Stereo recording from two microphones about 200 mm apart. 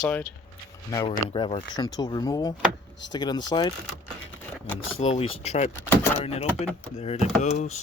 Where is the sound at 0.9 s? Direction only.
25° left (ahead or behind).